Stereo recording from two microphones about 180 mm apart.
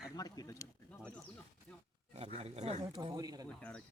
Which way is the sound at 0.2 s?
20° left (ahead or behind).